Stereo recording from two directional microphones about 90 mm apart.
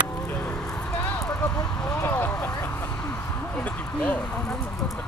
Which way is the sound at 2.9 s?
15° left (ahead or behind).